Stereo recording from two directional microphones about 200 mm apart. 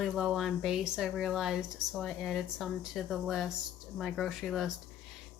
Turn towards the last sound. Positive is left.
turn(degrees=0)  # may be behind; listen again after turning